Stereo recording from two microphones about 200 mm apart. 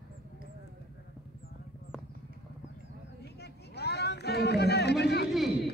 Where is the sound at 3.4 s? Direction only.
55° left (ahead or behind).